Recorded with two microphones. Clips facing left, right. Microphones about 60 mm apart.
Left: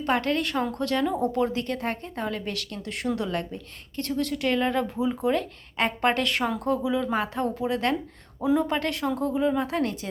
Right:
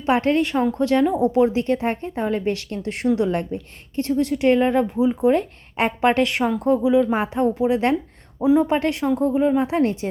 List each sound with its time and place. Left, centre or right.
0.0 s a woman's voice: right
1.1 s a woman's voice: centre
1.6 s a woman's voice: right
5.3 s a woman's voice: right